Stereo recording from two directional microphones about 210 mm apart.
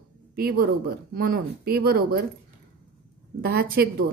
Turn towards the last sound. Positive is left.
turn(degrees=-45)  # may be behind; listen again after turning